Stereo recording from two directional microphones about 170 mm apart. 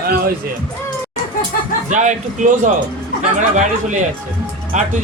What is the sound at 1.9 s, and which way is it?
Speech, 45° right (ahead or behind).